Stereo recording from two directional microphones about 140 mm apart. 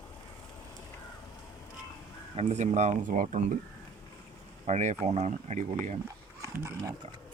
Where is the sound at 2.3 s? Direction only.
55° right (ahead or behind).